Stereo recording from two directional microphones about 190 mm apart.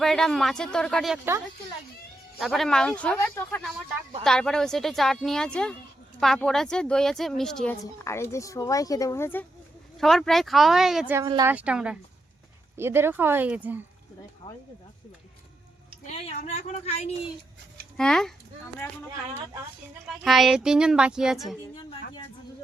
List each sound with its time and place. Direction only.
0.0 s speech: centre (ahead or behind)
2.4 s speech: centre (ahead or behind)
10.0 s speech: centre (ahead or behind)
11.1 s speech: 20° right (ahead or behind)
11.5 s speech: 5° right (ahead or behind)
16.1 s a woman's voice: 30° left (ahead or behind)
17.9 s a child's voice: 5° left (ahead or behind)
20.1 s speech: centre (ahead or behind)
21.8 s a sound: 25° left (ahead or behind)